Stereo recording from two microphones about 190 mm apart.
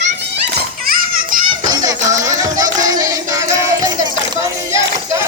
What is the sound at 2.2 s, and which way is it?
Music, 20° right (ahead or behind).